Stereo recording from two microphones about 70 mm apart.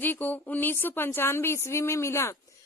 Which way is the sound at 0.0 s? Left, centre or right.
Left.